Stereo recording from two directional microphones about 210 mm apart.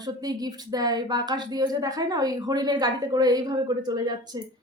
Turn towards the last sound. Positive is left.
turn(degrees=-20)  # may be behind; listen again after turning